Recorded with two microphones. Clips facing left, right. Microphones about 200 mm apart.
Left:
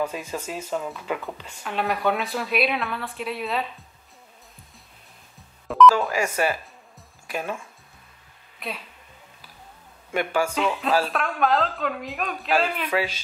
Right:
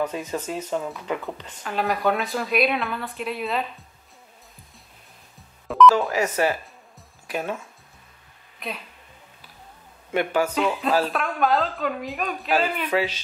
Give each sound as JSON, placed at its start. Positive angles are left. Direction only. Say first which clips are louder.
{"t": 0.0, "sound": "a woman's voice", "louder": "right 2 dB", "side_deg": 10}
{"t": 5.7, "sound": "beep", "louder": "even", "side_deg": 0}
{"t": 6.0, "sound": "speech", "louder": "right 2 dB", "side_deg": 10}
{"t": 8.5, "sound": "speech", "louder": "even", "side_deg": 0}
{"t": 10.1, "sound": "speech", "louder": "right 2 dB", "side_deg": 10}
{"t": 10.5, "sound": "a woman's voice", "louder": "right 1 dB", "side_deg": 0}
{"t": 12.9, "sound": "speech", "louder": "right 2 dB", "side_deg": 10}